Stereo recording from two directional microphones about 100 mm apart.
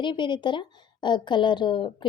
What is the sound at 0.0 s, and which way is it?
A woman's voice, 50° left (ahead or behind).